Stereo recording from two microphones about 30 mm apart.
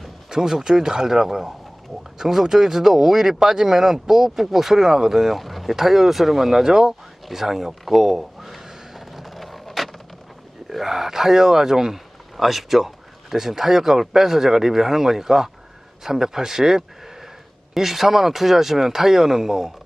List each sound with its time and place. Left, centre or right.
0.3 s speech: centre
7.3 s crow: centre
10.7 s speech: centre